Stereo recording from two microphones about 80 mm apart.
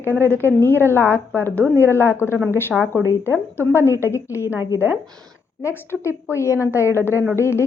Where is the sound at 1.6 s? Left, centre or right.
Right.